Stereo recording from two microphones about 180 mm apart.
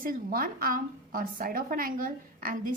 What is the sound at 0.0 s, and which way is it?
A woman's voice, 50° right (ahead or behind).